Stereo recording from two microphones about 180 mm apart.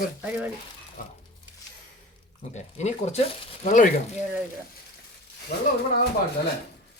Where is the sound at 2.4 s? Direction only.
40° left (ahead or behind).